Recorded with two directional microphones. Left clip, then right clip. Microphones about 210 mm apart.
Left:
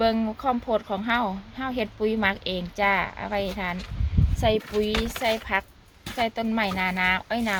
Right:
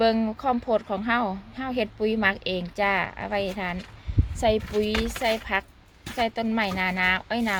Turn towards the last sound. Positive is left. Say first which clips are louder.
# even
turn(degrees=-15)  # may be behind; listen again after turning